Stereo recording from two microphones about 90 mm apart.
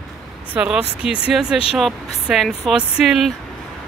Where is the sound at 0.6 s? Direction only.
10° right (ahead or behind).